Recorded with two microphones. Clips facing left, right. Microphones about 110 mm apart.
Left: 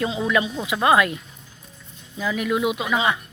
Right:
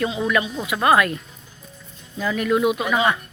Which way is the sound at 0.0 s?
20° left (ahead or behind).